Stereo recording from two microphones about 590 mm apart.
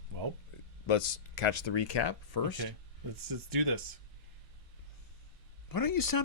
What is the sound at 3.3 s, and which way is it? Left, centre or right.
Speech, right.